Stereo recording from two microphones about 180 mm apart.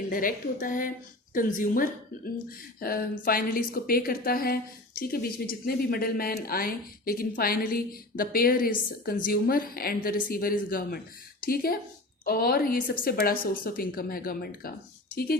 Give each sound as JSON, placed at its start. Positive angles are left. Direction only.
{"t": 0.1, "sound": "a woman's voice", "side_deg": 50}